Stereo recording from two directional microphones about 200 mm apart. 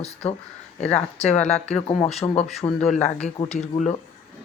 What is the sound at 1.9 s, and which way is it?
Speech, 30° left (ahead or behind).